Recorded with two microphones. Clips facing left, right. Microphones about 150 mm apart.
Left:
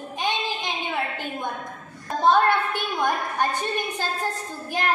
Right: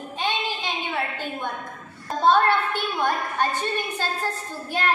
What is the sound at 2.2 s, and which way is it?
A woman's voice, 15° left (ahead or behind).